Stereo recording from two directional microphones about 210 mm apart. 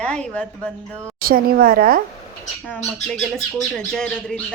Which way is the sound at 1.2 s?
45° right (ahead or behind).